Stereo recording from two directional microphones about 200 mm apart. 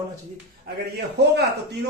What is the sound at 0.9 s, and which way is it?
Speech, 55° right (ahead or behind).